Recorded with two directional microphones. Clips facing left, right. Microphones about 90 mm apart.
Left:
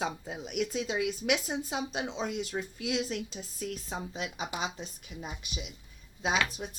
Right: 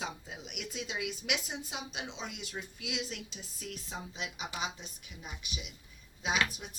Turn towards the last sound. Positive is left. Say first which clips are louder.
# left 3 dB
turn(degrees=30)  # may be behind; listen again after turning